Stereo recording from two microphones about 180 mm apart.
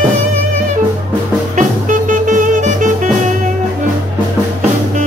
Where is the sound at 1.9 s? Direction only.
45° right (ahead or behind).